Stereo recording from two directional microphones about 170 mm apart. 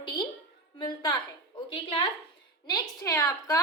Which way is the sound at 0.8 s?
25° left (ahead or behind).